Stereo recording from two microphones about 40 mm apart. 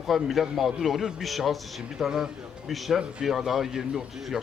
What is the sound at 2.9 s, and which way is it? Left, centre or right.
Speech, centre.